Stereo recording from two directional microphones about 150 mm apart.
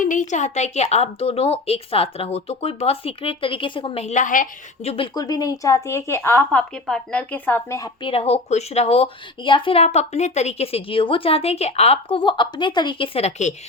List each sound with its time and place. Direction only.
0.0 s a woman's voice: 60° left (ahead or behind)
4.8 s a woman's voice: 45° left (ahead or behind)
5.1 s a woman's voice: 25° left (ahead or behind)
8.0 s speech: 40° left (ahead or behind)